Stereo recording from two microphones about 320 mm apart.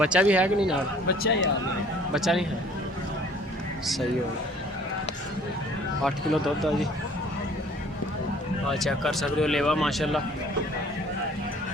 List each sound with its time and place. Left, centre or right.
0.0 s speech: centre
1.0 s speech: left
2.1 s speech: centre
6.1 s speech: centre
8.6 s speech: centre